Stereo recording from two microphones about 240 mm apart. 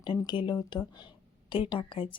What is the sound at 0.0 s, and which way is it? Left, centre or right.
Speech, centre.